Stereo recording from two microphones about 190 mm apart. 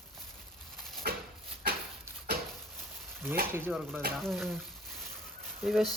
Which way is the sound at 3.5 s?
10° right (ahead or behind).